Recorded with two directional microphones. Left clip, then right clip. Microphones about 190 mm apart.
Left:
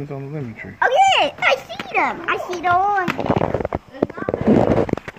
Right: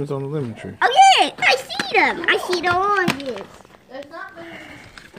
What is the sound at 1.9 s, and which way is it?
Speech, 15° left (ahead or behind).